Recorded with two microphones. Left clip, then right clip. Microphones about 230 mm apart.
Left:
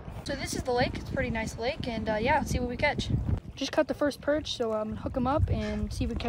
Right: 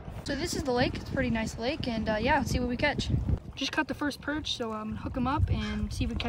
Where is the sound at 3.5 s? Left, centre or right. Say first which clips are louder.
Left 3 dB; centre.